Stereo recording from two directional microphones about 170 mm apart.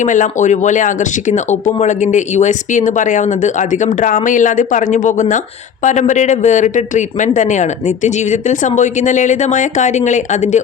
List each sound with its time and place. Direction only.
0.0 s speech: 45° left (ahead or behind)